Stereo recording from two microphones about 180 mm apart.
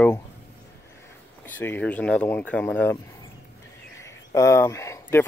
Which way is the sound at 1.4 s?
10° left (ahead or behind).